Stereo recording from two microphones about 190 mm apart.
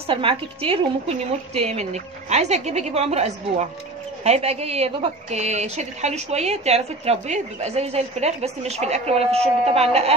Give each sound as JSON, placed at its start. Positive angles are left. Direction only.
{"t": 0.0, "sound": "a woman's voice", "side_deg": -30}